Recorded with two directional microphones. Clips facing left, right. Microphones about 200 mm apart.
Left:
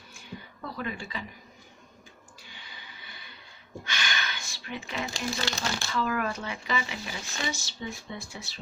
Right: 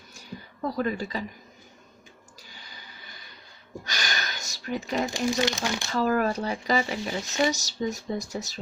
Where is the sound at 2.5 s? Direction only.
40° right (ahead or behind).